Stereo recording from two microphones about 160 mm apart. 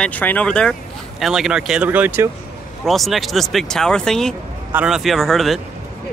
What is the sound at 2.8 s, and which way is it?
Speech, centre (ahead or behind).